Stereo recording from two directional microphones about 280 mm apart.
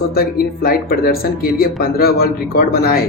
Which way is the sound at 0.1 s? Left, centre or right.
Left.